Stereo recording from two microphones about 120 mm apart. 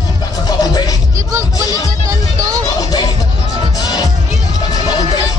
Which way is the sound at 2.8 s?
35° left (ahead or behind).